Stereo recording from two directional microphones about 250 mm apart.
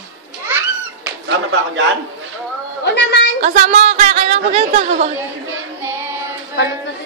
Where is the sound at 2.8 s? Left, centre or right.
Left.